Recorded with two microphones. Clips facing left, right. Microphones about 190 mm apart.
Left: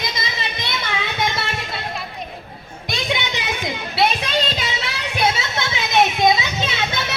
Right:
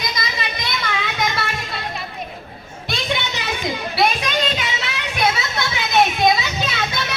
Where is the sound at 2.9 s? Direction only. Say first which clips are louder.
Even; 15° left (ahead or behind).